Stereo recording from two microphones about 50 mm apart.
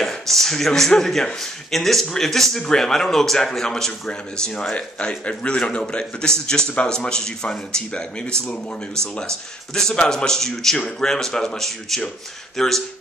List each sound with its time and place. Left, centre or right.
0.0 s a man's voice: centre
9.9 s a man's voice: centre